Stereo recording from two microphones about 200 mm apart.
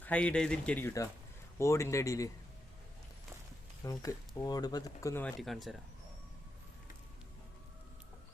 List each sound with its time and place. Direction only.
0.0 s speech: 5° left (ahead or behind)
3.8 s speech: 15° left (ahead or behind)
5.4 s speech: centre (ahead or behind)